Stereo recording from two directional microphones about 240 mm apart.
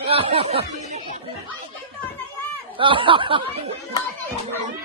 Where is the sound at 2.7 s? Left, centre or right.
Right.